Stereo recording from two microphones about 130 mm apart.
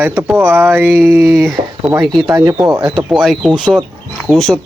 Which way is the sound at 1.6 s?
50° right (ahead or behind).